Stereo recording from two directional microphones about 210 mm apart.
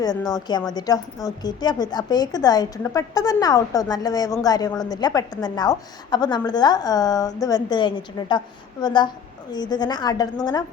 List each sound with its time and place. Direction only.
0.0 s a woman's voice: 20° left (ahead or behind)